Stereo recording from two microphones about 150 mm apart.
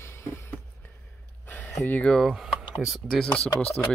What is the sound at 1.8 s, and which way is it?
Speech, 10° left (ahead or behind).